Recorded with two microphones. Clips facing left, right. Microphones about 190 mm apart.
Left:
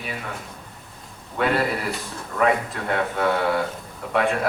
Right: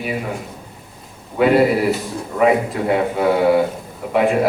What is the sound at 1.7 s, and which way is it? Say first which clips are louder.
A man's voice: right 10 dB; 5° right (ahead or behind).